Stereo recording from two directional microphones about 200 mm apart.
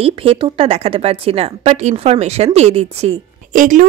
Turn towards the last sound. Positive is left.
turn(degrees=-40)  # may be behind; listen again after turning